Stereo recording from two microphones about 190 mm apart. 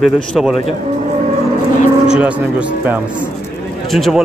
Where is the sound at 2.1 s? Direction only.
5° right (ahead or behind).